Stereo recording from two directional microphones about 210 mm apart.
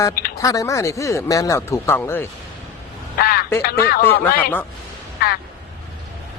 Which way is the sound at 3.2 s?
45° left (ahead or behind).